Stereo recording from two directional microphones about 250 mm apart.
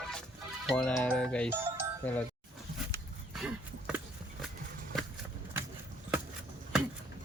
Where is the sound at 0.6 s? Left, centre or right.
Centre.